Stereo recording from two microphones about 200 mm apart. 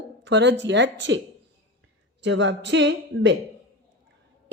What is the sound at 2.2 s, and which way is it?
Speech, 65° right (ahead or behind).